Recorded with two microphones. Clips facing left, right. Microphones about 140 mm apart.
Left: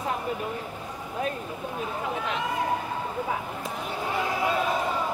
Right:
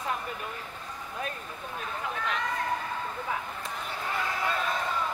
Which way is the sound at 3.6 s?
10° left (ahead or behind).